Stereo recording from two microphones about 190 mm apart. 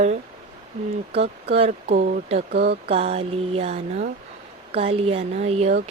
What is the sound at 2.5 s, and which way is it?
Speech, 60° right (ahead or behind).